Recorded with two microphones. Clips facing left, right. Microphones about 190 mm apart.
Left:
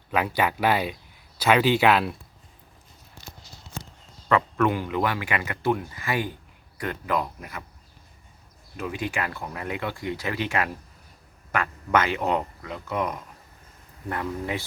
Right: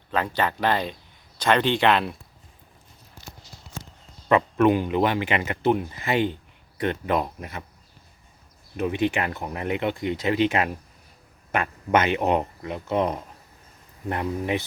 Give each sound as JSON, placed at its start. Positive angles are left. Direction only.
{"t": 0.1, "sound": "speech", "side_deg": 10}
{"t": 4.3, "sound": "speech", "side_deg": -20}
{"t": 8.7, "sound": "speech", "side_deg": -20}